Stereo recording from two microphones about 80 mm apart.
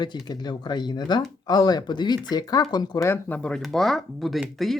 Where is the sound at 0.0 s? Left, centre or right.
Left.